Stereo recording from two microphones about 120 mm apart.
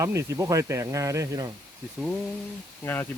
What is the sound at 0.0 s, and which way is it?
Speech, 25° right (ahead or behind).